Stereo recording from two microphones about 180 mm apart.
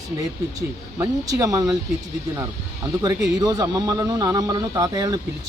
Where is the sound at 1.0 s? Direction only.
20° right (ahead or behind).